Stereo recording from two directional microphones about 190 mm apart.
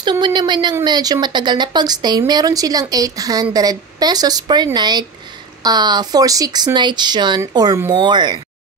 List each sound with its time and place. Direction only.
0.0 s speech: 25° right (ahead or behind)